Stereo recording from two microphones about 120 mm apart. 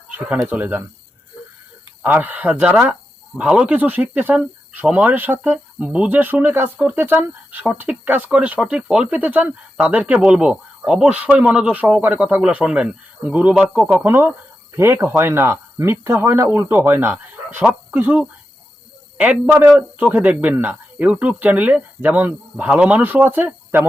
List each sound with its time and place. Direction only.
0.3 s speech: 15° right (ahead or behind)
2.0 s speech: 15° right (ahead or behind)